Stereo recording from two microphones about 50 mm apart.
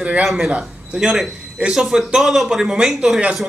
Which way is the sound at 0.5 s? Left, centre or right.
Right.